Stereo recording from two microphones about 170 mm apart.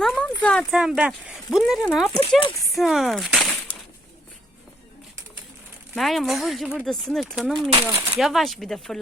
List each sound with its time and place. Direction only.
0.0 s a sound: centre (ahead or behind)
0.4 s speech: centre (ahead or behind)
5.9 s speech: centre (ahead or behind)
7.9 s speech: 15° right (ahead or behind)
8.2 s speech: centre (ahead or behind)